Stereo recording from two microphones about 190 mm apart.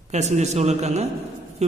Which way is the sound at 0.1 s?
35° right (ahead or behind).